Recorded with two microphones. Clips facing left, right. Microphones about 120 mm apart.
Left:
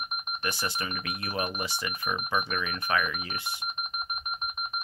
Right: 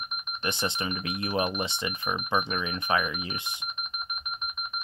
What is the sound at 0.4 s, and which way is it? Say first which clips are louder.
Speech: right 3 dB; 25° right (ahead or behind).